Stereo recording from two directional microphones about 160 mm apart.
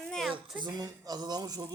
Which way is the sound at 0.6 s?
25° right (ahead or behind).